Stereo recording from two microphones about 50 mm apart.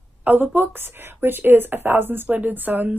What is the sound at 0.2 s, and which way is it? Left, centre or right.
A woman's voice, right.